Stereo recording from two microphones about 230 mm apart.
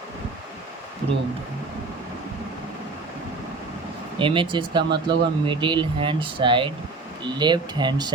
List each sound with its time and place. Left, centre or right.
4.2 s speech: right